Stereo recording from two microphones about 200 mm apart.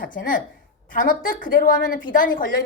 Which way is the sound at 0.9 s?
40° left (ahead or behind).